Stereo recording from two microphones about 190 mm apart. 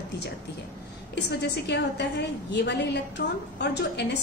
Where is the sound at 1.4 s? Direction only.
65° left (ahead or behind).